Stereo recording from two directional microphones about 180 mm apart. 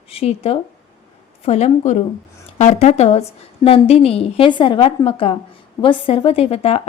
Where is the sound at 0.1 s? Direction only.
35° left (ahead or behind).